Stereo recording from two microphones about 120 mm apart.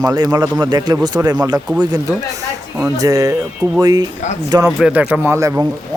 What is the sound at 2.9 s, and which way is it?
Speech, 30° right (ahead or behind).